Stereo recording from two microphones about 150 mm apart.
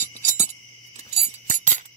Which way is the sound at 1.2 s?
55° right (ahead or behind).